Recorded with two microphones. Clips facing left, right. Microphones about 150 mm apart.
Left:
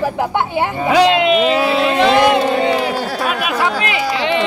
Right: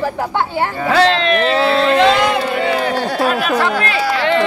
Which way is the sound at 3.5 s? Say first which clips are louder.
Right 2 dB; 10° left (ahead or behind).